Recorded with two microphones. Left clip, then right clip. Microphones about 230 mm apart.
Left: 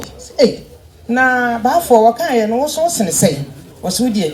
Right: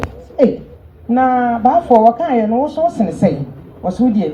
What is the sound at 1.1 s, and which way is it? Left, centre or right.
A woman's voice, left.